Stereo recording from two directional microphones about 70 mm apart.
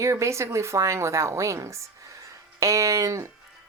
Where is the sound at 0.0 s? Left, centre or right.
Right.